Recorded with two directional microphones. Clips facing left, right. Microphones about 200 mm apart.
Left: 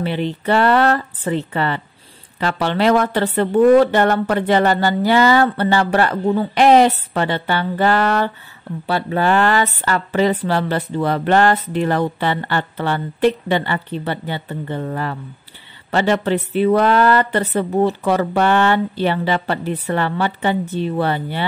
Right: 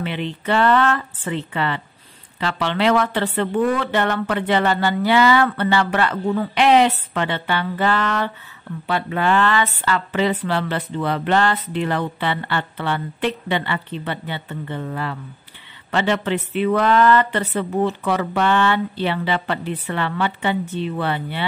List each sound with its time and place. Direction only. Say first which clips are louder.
0.0 s speech: left 5 dB; 40° left (ahead or behind)